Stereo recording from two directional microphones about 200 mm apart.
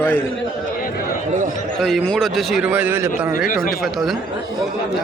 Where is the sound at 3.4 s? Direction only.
45° left (ahead or behind).